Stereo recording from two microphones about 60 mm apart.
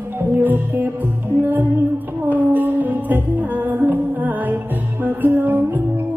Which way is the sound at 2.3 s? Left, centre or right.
Right.